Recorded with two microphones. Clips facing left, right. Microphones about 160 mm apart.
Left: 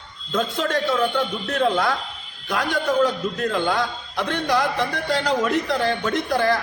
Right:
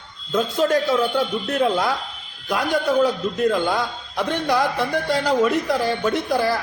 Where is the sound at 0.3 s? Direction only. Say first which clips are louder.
Right 4 dB; 10° right (ahead or behind).